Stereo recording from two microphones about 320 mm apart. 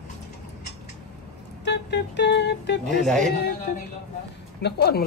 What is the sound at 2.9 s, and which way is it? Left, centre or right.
Speech, centre.